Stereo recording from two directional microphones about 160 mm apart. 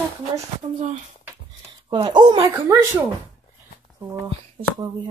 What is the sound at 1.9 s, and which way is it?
Speech, 30° right (ahead or behind).